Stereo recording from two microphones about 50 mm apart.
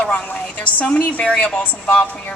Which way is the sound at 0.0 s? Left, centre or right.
Left.